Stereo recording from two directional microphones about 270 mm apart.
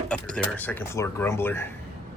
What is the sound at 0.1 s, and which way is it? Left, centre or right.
Speech, centre.